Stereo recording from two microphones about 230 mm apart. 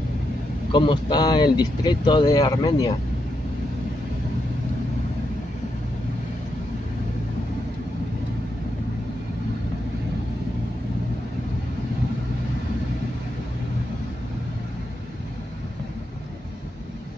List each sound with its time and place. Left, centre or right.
0.7 s speech: left